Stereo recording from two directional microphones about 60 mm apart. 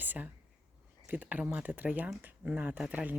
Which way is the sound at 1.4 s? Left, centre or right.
Right.